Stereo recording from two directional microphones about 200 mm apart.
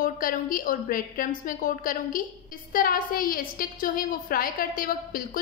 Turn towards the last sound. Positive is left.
turn(degrees=45)  # may be behind; listen again after turning